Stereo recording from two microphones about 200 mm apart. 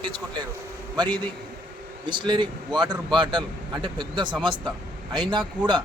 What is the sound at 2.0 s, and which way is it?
Speech, 20° right (ahead or behind).